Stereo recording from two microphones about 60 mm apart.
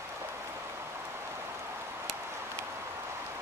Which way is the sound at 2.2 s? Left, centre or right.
Right.